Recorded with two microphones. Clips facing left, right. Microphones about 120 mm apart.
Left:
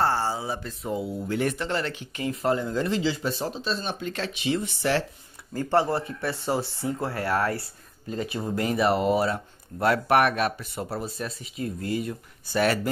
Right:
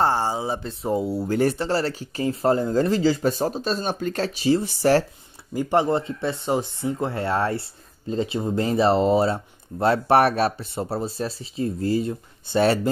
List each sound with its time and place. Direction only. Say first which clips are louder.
0.0 s speech: right 3 dB; 20° right (ahead or behind)
0.8 s speech: right 6 dB; 40° right (ahead or behind)
5.5 s speech: right 3 dB; 15° right (ahead or behind)